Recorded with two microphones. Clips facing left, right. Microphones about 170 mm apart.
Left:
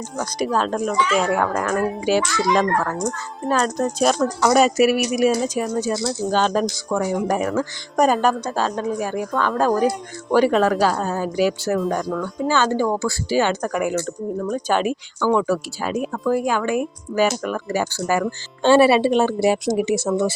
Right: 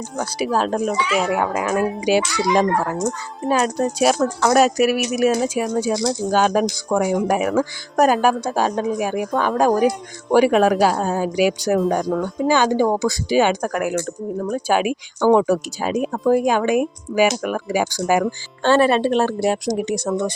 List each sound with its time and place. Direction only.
0.2 s speech: 5° right (ahead or behind)
18.6 s speech: 10° left (ahead or behind)